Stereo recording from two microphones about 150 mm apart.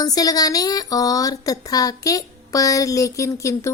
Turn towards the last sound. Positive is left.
turn(degrees=20)  # may be behind; listen again after turning